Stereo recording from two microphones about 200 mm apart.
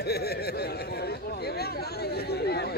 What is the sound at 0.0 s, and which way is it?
Chatter, 55° left (ahead or behind).